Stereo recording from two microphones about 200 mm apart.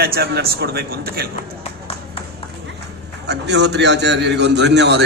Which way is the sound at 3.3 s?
60° right (ahead or behind).